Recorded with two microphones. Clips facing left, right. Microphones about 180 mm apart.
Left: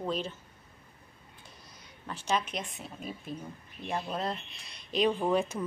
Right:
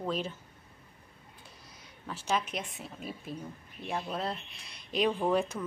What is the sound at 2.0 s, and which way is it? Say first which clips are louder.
Speech: left 1 dB; 5° right (ahead or behind).